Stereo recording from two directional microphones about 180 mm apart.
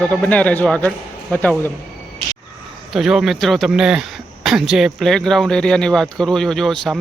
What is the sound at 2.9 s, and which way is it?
A man's voice, centre (ahead or behind).